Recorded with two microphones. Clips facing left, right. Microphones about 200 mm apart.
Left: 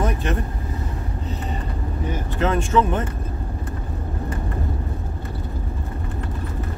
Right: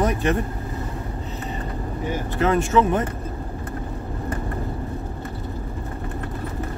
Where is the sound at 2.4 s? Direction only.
10° right (ahead or behind).